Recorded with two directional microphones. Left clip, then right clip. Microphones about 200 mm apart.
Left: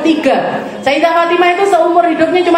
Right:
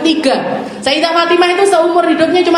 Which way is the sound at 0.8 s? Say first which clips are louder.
Left 1 dB; 40° right (ahead or behind).